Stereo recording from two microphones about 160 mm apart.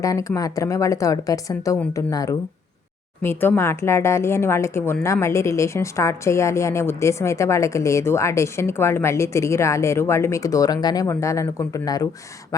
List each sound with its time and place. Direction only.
0.0 s a woman's voice: 20° left (ahead or behind)